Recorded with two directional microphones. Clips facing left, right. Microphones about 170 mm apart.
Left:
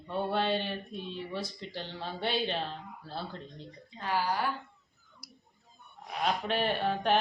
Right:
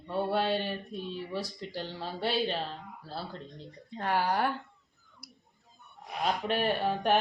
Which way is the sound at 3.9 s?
55° right (ahead or behind).